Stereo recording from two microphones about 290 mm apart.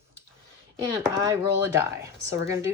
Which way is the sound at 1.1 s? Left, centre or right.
Centre.